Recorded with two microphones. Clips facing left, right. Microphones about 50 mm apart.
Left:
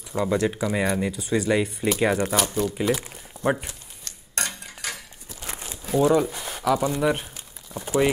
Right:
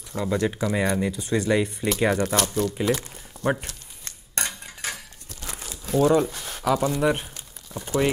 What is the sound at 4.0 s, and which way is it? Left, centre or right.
Cutlery, right.